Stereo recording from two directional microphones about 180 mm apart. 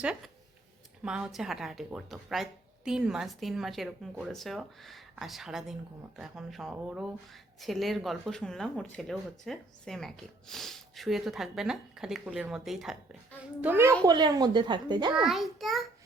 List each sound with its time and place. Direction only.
1.0 s a child's voice: 5° right (ahead or behind)
14.0 s speech: 20° right (ahead or behind)
15.1 s speech: centre (ahead or behind)